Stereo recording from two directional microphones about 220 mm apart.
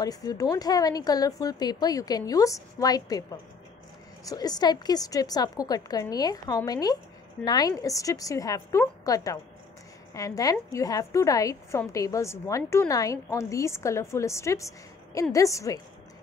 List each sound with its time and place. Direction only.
0.0 s a woman's voice: 15° left (ahead or behind)